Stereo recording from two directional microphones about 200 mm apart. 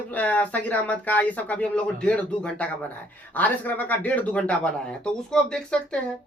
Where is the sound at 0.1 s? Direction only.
5° left (ahead or behind).